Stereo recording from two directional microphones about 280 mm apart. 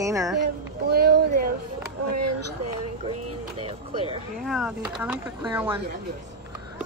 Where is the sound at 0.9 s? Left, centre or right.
Right.